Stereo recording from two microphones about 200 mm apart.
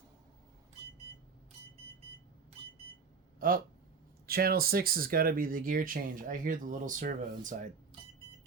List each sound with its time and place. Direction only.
3.4 s speech: 45° right (ahead or behind)